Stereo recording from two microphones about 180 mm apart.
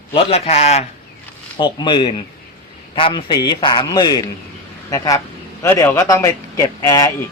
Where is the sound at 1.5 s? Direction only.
25° left (ahead or behind).